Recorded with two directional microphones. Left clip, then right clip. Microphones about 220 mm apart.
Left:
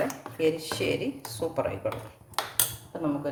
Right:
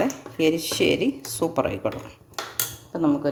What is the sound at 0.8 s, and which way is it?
Speech, 50° right (ahead or behind).